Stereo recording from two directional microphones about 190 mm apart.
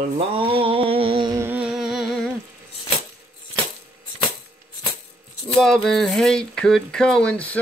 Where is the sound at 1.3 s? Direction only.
10° right (ahead or behind).